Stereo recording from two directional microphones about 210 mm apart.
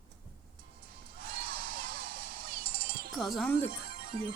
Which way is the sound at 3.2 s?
Centre (ahead or behind).